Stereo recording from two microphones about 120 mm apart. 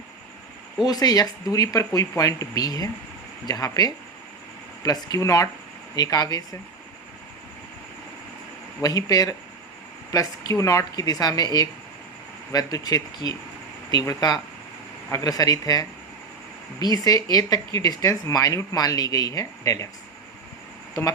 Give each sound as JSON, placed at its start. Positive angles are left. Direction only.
{"t": 0.9, "sound": "speech", "side_deg": 30}
{"t": 8.8, "sound": "speech", "side_deg": 30}